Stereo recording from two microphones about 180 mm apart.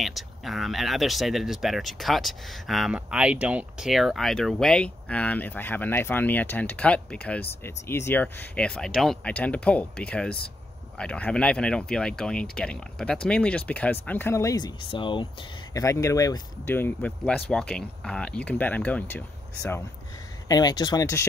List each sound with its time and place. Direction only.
0.0 s speech: centre (ahead or behind); by 15.2 s 25° left (ahead or behind)
15.7 s speech: 15° left (ahead or behind)
20.4 s speech: 20° left (ahead or behind)